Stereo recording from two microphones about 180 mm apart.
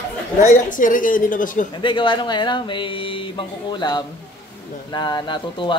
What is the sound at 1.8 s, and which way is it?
Speech, 30° left (ahead or behind).